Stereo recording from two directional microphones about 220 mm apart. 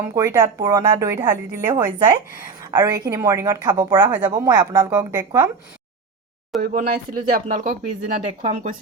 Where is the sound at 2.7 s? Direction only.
20° right (ahead or behind).